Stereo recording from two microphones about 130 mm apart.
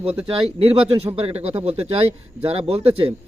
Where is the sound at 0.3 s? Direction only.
45° right (ahead or behind).